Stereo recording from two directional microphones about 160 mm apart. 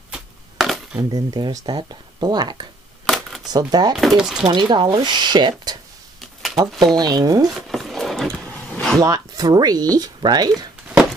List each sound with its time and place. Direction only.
0.1 s a sound: 5° right (ahead or behind)
1.1 s speech: 25° right (ahead or behind)
3.1 s a sound: centre (ahead or behind)
3.4 s speech: 25° right (ahead or behind)
3.9 s speech: centre (ahead or behind)
4.5 s speech: 30° right (ahead or behind)
7.0 s speech: 25° right (ahead or behind)
7.6 s a sound: centre (ahead or behind)
9.0 s speech: 25° right (ahead or behind)